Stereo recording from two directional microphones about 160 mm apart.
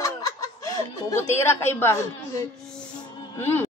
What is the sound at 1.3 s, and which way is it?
Speech, 15° left (ahead or behind).